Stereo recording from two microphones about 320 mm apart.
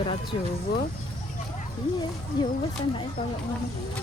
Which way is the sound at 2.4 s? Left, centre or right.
Centre.